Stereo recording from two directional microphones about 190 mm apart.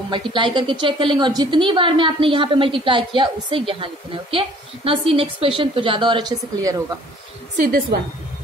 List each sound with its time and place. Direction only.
0.1 s a woman's voice: 25° right (ahead or behind)
7.5 s a woman's voice: 50° right (ahead or behind)